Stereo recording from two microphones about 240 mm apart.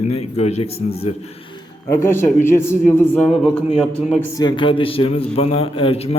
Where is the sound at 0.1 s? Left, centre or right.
Left.